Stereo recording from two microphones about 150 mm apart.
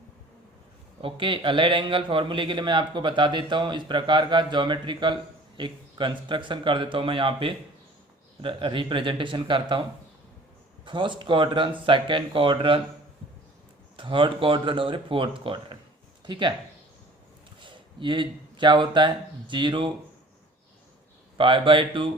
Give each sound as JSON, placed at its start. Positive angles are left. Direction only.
{"t": 1.0, "sound": "a man's voice", "side_deg": -35}
{"t": 10.8, "sound": "a man's voice", "side_deg": -30}
{"t": 13.9, "sound": "a man's voice", "side_deg": -35}
{"t": 17.6, "sound": "speech", "side_deg": -35}
{"t": 21.3, "sound": "a man's voice", "side_deg": -35}